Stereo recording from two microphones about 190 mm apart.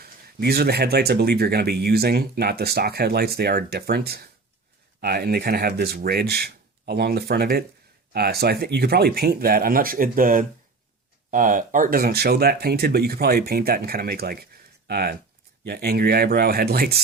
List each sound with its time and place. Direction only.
0.0 s speech: 55° right (ahead or behind)